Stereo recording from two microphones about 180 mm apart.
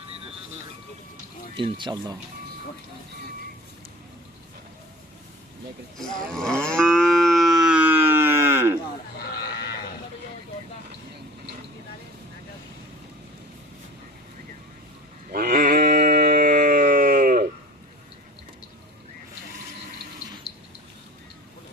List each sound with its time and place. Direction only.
1.5 s speech: 25° right (ahead or behind)
6.0 s livestock: 5° left (ahead or behind); by 8.8 s 15° right (ahead or behind)
15.3 s a sound: 55° right (ahead or behind)